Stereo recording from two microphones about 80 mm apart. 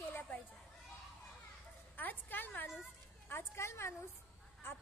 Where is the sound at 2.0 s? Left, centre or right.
Left.